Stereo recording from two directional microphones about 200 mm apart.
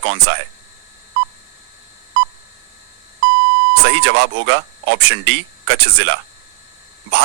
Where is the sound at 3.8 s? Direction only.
65° right (ahead or behind).